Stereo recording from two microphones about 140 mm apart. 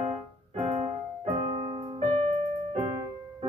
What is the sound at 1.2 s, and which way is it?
Piano, 40° right (ahead or behind).